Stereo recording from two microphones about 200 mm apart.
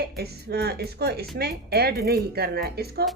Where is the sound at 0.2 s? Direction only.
50° right (ahead or behind).